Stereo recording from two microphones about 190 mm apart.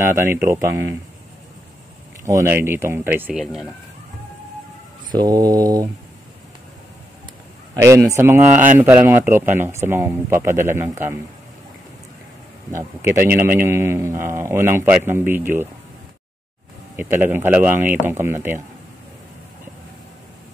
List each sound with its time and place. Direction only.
0.0 s speech: 15° right (ahead or behind)
2.2 s speech: 15° right (ahead or behind)
5.1 s mantra: 20° right (ahead or behind)
7.7 s speech: 15° right (ahead or behind)
12.7 s speech: 15° right (ahead or behind)
16.9 s speech: 10° right (ahead or behind)